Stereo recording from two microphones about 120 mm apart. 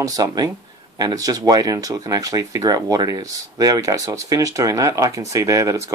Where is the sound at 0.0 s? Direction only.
30° right (ahead or behind).